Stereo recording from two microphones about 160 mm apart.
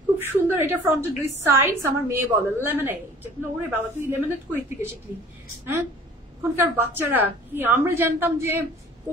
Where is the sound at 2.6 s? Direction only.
15° right (ahead or behind).